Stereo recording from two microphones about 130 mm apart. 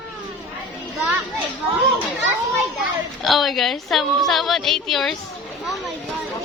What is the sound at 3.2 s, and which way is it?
A woman's voice, centre (ahead or behind).